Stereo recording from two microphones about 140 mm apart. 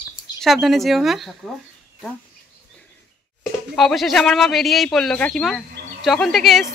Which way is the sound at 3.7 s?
Centre (ahead or behind).